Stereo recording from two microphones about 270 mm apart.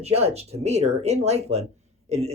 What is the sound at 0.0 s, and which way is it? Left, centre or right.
Speech, right.